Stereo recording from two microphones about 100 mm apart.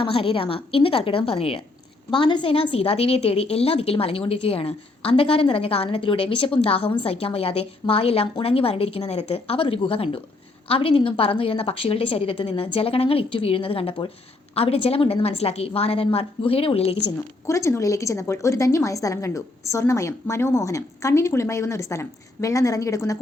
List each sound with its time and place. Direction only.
0.0 s a woman's voice: 60° left (ahead or behind)
2.0 s a woman's voice: 50° left (ahead or behind)
2.5 s a woman's voice: 65° left (ahead or behind)
14.5 s a woman's voice: 80° left
17.4 s a woman's voice: 30° left (ahead or behind)